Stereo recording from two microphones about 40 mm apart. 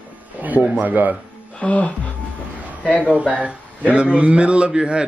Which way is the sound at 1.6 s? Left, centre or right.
Left.